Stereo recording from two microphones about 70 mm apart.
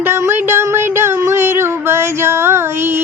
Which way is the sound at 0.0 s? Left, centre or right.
Right.